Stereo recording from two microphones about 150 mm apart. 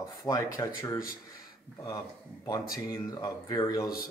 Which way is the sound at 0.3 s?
20° left (ahead or behind).